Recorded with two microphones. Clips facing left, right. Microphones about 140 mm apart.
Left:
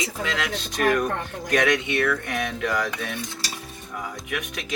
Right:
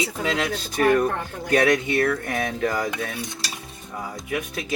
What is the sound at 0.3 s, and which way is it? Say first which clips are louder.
A woman's voice: right 3 dB; 25° right (ahead or behind).